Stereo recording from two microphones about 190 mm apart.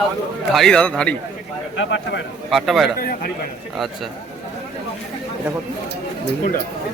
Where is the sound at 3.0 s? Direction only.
50° left (ahead or behind).